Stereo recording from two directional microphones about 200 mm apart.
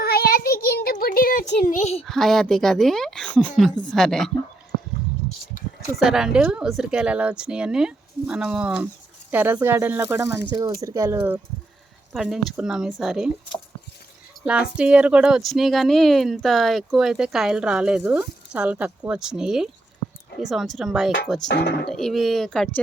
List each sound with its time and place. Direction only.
0.0 s a sound: 50° left (ahead or behind); by 2.0 s 30° left (ahead or behind)
2.0 s speech: centre (ahead or behind)
6.0 s speech: centre (ahead or behind)
12.1 s speech: centre (ahead or behind)
21.5 s speech: 55° left (ahead or behind)
21.8 s speech: centre (ahead or behind)